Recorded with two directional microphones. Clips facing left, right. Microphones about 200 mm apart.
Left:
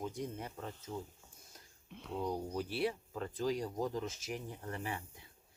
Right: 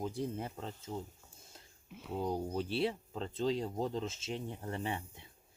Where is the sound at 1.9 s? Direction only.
5° right (ahead or behind).